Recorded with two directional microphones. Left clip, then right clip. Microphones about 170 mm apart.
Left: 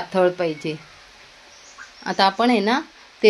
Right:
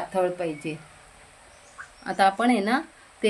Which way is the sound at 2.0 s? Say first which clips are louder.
Left 3 dB; 25° left (ahead or behind).